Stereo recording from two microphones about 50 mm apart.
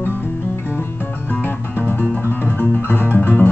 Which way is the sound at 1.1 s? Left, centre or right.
Left.